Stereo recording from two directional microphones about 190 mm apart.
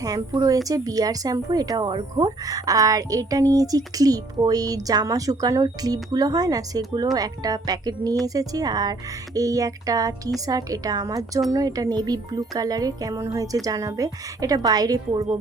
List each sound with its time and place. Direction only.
0.0 s speech: 20° right (ahead or behind)